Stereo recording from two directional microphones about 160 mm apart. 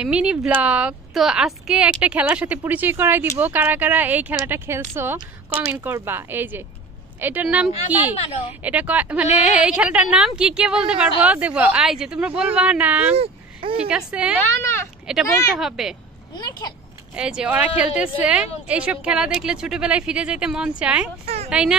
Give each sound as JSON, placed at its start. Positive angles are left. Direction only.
{"t": 0.0, "sound": "a woman's voice", "side_deg": -5}
{"t": 8.1, "sound": "a woman's voice", "side_deg": 35}
{"t": 8.6, "sound": "a woman's voice", "side_deg": -10}
{"t": 13.1, "sound": "a sound", "side_deg": -35}
{"t": 13.7, "sound": "a woman's voice", "side_deg": -5}
{"t": 14.4, "sound": "speech", "side_deg": 15}
{"t": 15.1, "sound": "speech", "side_deg": -5}
{"t": 16.3, "sound": "a child's voice", "side_deg": 25}
{"t": 17.1, "sound": "a woman's voice", "side_deg": -5}